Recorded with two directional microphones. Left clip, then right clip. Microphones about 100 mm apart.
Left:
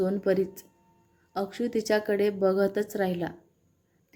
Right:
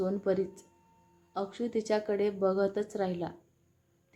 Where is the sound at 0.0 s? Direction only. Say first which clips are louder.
Left 5 dB; 35° left (ahead or behind).